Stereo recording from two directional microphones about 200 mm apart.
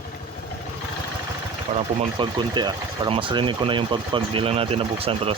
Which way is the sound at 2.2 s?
25° right (ahead or behind).